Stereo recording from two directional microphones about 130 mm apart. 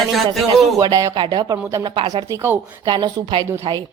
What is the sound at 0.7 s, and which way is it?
A woman's voice, 25° right (ahead or behind).